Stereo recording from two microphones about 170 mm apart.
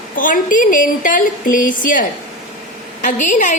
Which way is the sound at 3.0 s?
50° left (ahead or behind).